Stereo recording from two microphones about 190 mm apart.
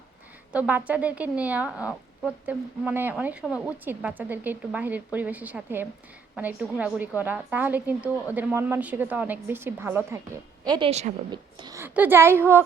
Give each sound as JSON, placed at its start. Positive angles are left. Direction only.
{"t": 0.5, "sound": "a woman's voice", "side_deg": -5}
{"t": 10.7, "sound": "a woman's voice", "side_deg": -30}
{"t": 11.3, "sound": "a woman's voice", "side_deg": -25}